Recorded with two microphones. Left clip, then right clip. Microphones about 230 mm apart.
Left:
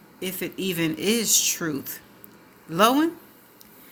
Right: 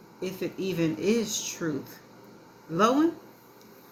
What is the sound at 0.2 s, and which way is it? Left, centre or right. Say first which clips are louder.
Speech: left 2 dB; left.